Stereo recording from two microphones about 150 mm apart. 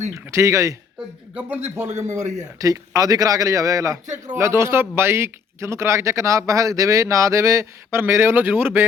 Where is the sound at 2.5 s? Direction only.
25° right (ahead or behind).